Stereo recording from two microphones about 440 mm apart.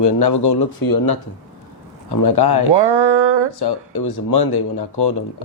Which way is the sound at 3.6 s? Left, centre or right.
Left.